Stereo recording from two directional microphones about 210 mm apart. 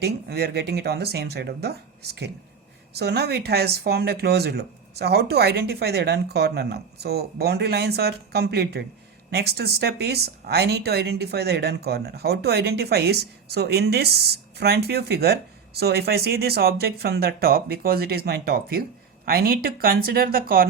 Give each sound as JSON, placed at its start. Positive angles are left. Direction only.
{"t": 0.0, "sound": "speech", "side_deg": -50}